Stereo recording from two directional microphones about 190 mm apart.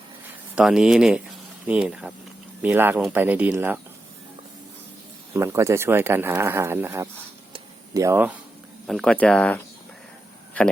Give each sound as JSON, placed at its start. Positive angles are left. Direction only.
{"t": 0.5, "sound": "speech", "side_deg": -5}
{"t": 5.3, "sound": "speech", "side_deg": -15}
{"t": 7.5, "sound": "a sound", "side_deg": -15}
{"t": 8.9, "sound": "speech", "side_deg": 5}